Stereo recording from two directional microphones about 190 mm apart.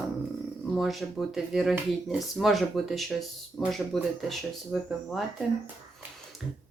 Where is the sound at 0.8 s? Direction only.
Centre (ahead or behind).